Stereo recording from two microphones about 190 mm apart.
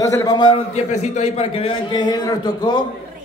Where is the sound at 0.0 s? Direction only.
20° left (ahead or behind).